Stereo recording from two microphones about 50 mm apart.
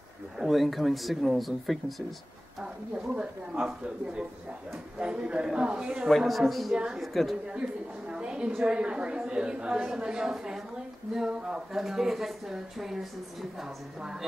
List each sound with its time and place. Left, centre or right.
0.4 s a woman's voice: centre
2.6 s a woman's voice: centre
6.0 s a woman's voice: centre
6.7 s a woman's voice: centre
7.0 s a woman's voice: centre
7.4 s a sound: centre
8.6 s a woman's voice: right